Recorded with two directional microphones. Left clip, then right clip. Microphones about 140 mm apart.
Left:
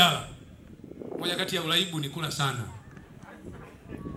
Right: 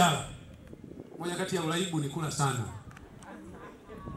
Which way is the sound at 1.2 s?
25° left (ahead or behind).